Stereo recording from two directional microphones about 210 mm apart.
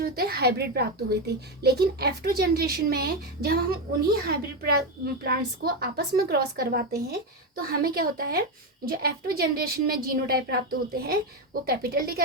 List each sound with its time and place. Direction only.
0.0 s speech: 50° right (ahead or behind)